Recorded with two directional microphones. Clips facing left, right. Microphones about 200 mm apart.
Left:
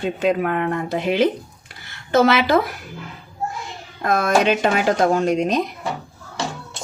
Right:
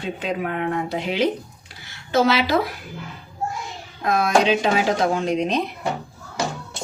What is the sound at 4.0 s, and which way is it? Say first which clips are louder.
Speech: left 1 dB; 50° left (ahead or behind).